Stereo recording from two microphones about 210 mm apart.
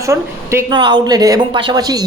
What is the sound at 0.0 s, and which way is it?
Speech, 15° right (ahead or behind).